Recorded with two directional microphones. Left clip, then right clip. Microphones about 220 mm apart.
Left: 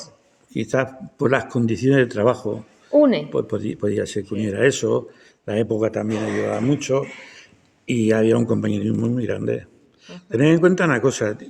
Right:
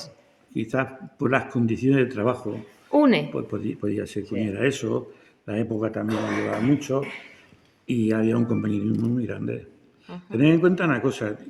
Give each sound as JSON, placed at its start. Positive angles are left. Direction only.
{"t": 0.5, "sound": "speech", "side_deg": 40}
{"t": 3.0, "sound": "speech", "side_deg": -35}
{"t": 3.3, "sound": "speech", "side_deg": 40}